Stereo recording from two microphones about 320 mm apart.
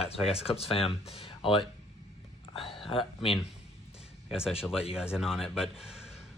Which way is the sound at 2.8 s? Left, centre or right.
Centre.